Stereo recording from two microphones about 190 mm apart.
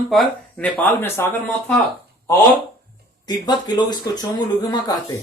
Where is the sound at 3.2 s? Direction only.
20° left (ahead or behind).